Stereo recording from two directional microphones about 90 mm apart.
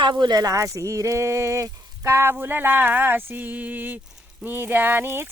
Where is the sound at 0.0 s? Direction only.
55° right (ahead or behind).